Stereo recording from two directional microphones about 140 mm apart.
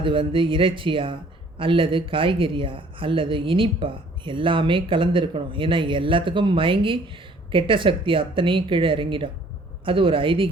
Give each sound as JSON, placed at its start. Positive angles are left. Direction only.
{"t": 0.0, "sound": "speech", "side_deg": -35}